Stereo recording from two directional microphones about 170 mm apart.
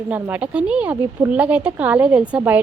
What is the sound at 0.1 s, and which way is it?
A woman's voice, 10° right (ahead or behind).